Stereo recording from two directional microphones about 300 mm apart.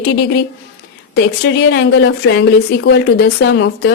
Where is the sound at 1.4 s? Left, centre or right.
Left.